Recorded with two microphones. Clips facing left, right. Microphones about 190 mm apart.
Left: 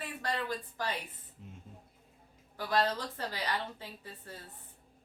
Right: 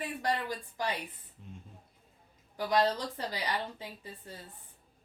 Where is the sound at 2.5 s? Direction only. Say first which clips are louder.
Right 3 dB; 15° right (ahead or behind).